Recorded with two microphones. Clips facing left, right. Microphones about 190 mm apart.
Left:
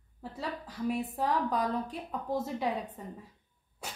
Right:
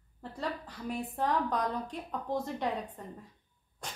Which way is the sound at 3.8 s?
5° left (ahead or behind).